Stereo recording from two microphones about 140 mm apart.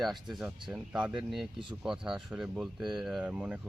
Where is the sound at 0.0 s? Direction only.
Centre (ahead or behind).